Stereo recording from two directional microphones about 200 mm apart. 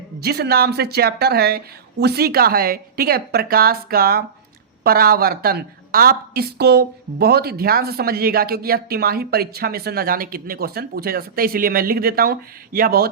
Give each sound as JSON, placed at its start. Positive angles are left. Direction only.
{"t": 0.2, "sound": "a woman's voice", "side_deg": -50}